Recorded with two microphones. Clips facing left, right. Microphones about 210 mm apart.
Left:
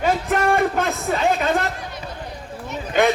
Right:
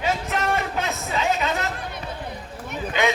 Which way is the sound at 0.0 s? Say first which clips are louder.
Left 5 dB; 50° left (ahead or behind).